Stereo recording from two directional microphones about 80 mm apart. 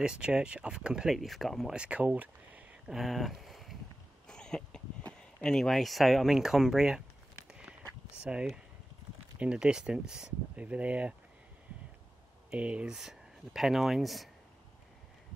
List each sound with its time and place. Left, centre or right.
0.0 s speech: centre
1.7 s speech: centre
2.9 s a sound: centre
4.3 s speech: centre
7.4 s walk: centre
8.2 s speech: centre
12.4 s speech: centre
12.9 s speech: centre